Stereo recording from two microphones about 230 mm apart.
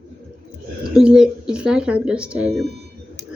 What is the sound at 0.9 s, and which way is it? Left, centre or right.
Speech, centre.